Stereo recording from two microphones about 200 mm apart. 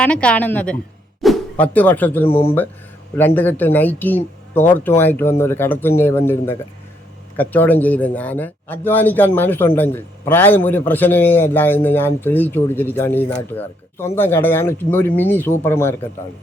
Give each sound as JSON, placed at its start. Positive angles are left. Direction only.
{"t": 0.0, "sound": "speech", "side_deg": 5}
{"t": 2.2, "sound": "speech", "side_deg": 30}
{"t": 3.2, "sound": "speech", "side_deg": 10}